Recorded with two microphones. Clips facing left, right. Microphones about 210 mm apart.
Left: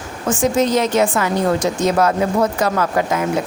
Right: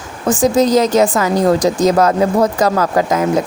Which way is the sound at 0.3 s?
35° right (ahead or behind).